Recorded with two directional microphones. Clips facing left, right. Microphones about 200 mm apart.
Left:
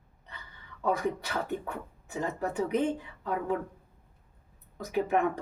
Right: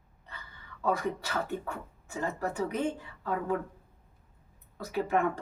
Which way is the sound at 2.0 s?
20° left (ahead or behind).